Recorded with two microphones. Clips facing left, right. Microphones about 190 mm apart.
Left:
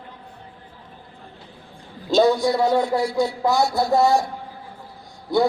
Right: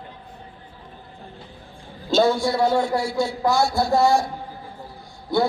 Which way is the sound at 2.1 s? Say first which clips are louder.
Left 2 dB; 20° left (ahead or behind).